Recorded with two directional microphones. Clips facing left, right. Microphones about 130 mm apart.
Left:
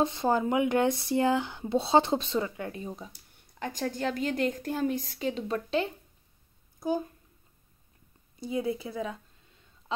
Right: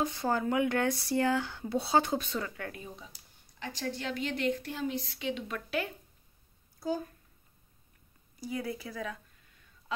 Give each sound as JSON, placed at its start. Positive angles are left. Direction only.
{"t": 0.0, "sound": "speech", "side_deg": 20}
{"t": 3.5, "sound": "a woman's voice", "side_deg": 45}
{"t": 6.8, "sound": "speech", "side_deg": 20}
{"t": 8.4, "sound": "a sound", "side_deg": 20}